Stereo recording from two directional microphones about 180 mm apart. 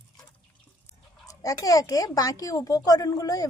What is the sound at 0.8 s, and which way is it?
A woman's voice, 20° left (ahead or behind).